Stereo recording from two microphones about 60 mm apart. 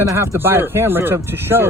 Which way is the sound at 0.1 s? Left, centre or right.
Right.